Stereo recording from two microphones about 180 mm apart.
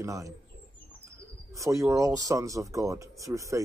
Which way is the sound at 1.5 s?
15° right (ahead or behind).